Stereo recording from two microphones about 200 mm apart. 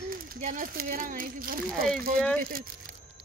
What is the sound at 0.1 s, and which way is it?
A child's voice, 45° right (ahead or behind).